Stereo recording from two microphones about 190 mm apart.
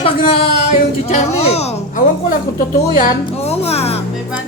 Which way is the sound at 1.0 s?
35° left (ahead or behind).